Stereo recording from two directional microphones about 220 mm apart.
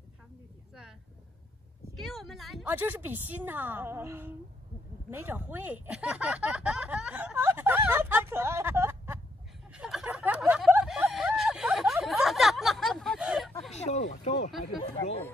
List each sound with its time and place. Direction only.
2.0 s a woman's voice: centre (ahead or behind)
9.7 s a sound: centre (ahead or behind)
13.7 s speech: 30° left (ahead or behind)